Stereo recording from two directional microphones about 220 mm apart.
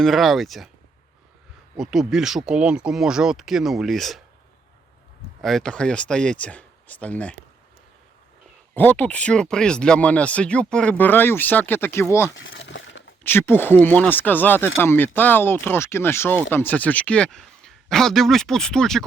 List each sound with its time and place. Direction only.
0.0 s speech: centre (ahead or behind)
1.7 s speech: centre (ahead or behind)
5.4 s speech: centre (ahead or behind)
8.7 s speech: 10° left (ahead or behind)
12.4 s crumpling: 55° left (ahead or behind)
13.2 s speech: 10° left (ahead or behind)